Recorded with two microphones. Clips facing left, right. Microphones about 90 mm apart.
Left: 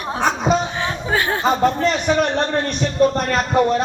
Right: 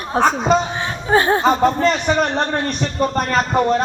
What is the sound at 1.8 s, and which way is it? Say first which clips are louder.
A man's voice: right 1 dB; centre (ahead or behind).